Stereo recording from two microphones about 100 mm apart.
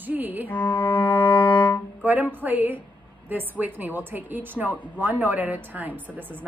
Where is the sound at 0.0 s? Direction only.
15° right (ahead or behind).